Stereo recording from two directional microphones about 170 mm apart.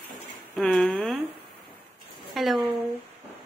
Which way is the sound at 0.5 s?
5° left (ahead or behind).